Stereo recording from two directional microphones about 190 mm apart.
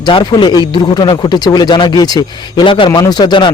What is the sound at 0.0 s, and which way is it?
A man's voice, 25° left (ahead or behind).